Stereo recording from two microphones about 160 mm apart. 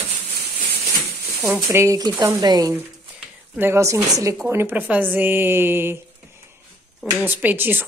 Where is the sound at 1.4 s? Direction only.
Centre (ahead or behind).